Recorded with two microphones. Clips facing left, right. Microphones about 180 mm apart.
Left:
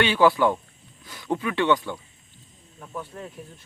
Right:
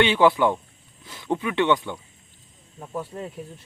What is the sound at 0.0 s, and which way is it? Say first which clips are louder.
Speech: right 1 dB; 20° right (ahead or behind).